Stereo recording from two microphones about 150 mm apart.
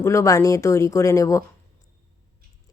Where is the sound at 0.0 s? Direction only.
20° left (ahead or behind).